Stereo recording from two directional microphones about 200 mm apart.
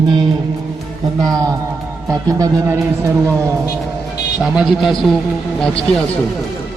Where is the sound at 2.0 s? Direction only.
15° right (ahead or behind).